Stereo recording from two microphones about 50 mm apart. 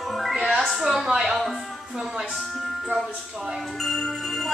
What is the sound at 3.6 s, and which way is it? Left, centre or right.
Music, centre.